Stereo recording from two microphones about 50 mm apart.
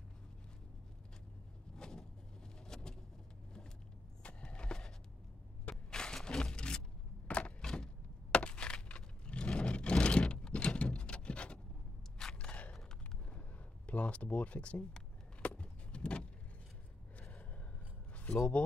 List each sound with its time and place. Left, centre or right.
1.8 s vehicle: centre
4.2 s a sound: left
7.6 s a sound: centre
12.2 s biting: centre
12.4 s gasp: left
13.8 s speech: left
15.4 s vehicle: left
17.2 s gasp: left